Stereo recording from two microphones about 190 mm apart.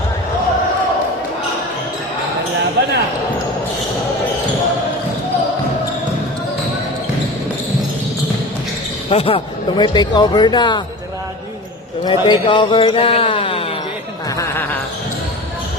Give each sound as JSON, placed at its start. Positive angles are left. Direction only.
{"t": 2.8, "sound": "basketball bounce", "side_deg": -65}
{"t": 9.0, "sound": "speech", "side_deg": 30}
{"t": 12.0, "sound": "speech", "side_deg": 25}
{"t": 14.3, "sound": "music", "side_deg": 15}